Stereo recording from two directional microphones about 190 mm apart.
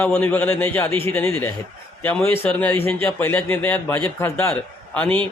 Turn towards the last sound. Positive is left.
turn(degrees=10)  # may be behind; listen again after turning